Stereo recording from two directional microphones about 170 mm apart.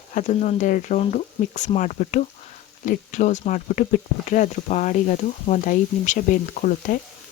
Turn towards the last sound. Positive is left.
turn(degrees=50)  # may be behind; listen again after turning